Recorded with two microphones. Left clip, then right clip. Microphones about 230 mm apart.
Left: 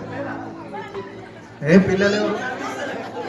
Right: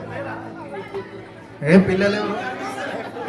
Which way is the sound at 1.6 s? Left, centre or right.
Right.